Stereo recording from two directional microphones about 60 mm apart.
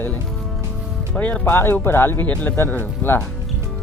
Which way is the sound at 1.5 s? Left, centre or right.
Left.